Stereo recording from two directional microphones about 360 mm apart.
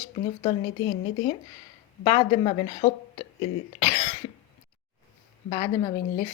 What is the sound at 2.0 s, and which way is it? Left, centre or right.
Speech, centre.